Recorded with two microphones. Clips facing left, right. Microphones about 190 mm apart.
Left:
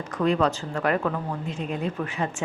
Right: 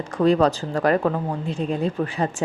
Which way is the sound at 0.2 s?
35° right (ahead or behind).